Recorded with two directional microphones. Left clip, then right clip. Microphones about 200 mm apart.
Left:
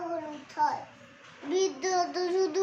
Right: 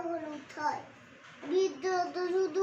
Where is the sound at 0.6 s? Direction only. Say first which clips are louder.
Left 6 dB; 20° left (ahead or behind).